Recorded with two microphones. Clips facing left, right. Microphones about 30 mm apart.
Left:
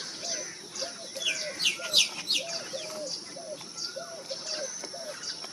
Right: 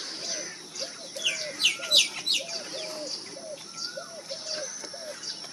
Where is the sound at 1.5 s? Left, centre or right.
Right.